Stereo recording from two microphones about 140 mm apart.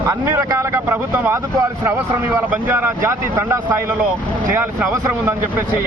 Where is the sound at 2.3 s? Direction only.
15° right (ahead or behind).